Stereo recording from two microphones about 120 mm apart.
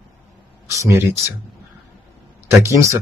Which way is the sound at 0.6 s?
25° right (ahead or behind).